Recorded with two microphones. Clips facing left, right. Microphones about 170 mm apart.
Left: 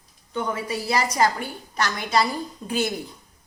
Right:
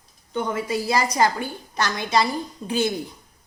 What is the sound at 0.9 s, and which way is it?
A woman's voice, 30° right (ahead or behind).